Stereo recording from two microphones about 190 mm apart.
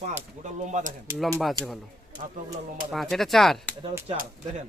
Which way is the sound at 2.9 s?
Centre (ahead or behind).